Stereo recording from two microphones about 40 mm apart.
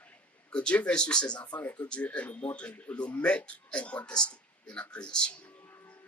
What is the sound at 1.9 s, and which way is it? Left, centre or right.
Speech, left.